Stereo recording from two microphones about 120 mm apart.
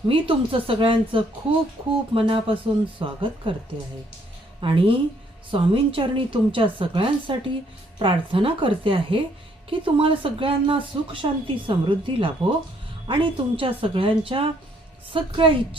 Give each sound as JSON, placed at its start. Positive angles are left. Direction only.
{"t": 0.1, "sound": "speech", "side_deg": -50}
{"t": 4.6, "sound": "speech", "side_deg": -50}